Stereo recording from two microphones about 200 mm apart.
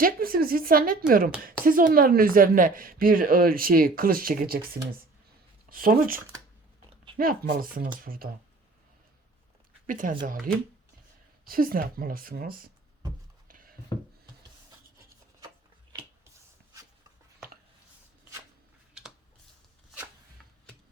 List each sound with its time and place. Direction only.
0.0 s speech: 45° right (ahead or behind)
7.2 s speech: 45° right (ahead or behind)
9.8 s speech: 45° right (ahead or behind)
13.5 s a sound: 45° right (ahead or behind)